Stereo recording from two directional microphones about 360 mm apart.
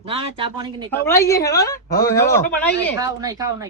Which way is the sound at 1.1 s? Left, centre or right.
Centre.